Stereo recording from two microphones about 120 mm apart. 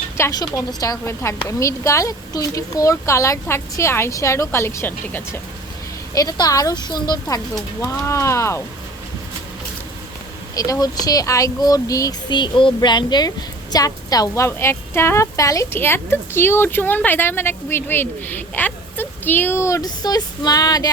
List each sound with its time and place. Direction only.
0.2 s a woman's voice: 30° left (ahead or behind)
6.1 s a woman's voice: 30° left (ahead or behind)
10.5 s a woman's voice: 30° left (ahead or behind)